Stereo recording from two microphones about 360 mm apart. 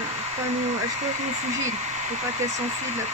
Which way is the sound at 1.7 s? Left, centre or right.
Centre.